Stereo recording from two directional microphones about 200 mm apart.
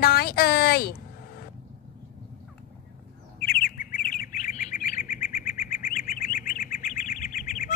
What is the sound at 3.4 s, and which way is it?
Bird, 50° left (ahead or behind).